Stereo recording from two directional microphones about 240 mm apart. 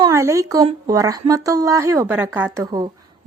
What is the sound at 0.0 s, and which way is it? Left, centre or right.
Speech, centre.